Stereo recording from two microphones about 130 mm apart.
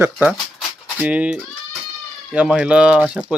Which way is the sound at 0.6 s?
10° right (ahead or behind).